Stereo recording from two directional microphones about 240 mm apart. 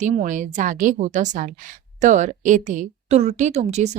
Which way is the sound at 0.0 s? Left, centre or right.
Right.